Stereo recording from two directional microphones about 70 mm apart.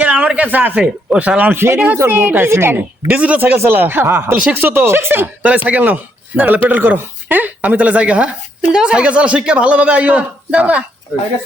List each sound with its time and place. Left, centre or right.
0.0 s a sound: centre
1.1 s speech: centre
1.5 s speech: right
3.2 s speech: right
4.4 s speech: right
5.4 s speech: centre